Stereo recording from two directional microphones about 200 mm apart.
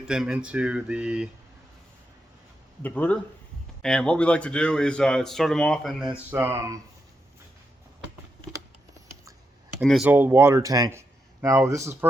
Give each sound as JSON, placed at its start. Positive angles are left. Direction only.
{"t": 0.1, "sound": "a man's voice", "side_deg": -5}
{"t": 2.8, "sound": "a man's voice", "side_deg": 5}
{"t": 6.3, "sound": "speech", "side_deg": -10}
{"t": 9.8, "sound": "a man's voice", "side_deg": 0}
{"t": 10.1, "sound": "speech", "side_deg": -10}